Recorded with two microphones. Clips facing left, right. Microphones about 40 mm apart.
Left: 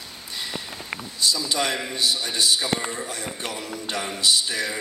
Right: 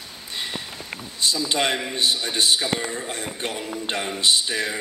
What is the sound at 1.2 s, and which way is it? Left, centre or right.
A man's voice, right.